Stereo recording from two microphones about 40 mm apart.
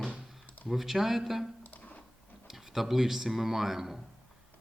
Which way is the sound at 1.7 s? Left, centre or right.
Left.